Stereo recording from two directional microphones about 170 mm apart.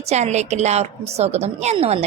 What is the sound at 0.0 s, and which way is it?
A woman's voice, 40° right (ahead or behind).